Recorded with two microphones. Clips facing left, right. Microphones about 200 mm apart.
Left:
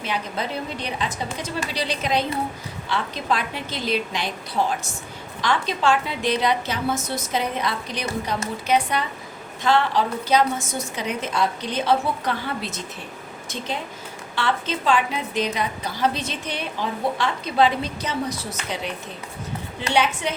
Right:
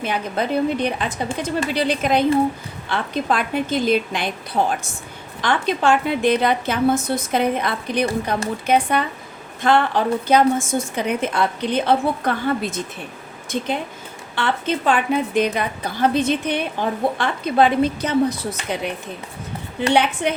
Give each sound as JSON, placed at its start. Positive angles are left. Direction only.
{"t": 0.0, "sound": "a woman's voice", "side_deg": -55}
{"t": 20.2, "sound": "a woman's voice", "side_deg": -55}